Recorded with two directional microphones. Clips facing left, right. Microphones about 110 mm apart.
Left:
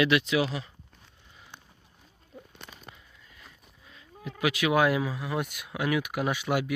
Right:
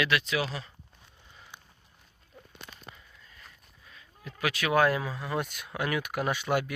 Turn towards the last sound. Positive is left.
turn(degrees=5)  # may be behind; listen again after turning